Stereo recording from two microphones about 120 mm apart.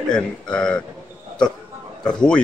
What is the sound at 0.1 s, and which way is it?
Speech, 10° left (ahead or behind).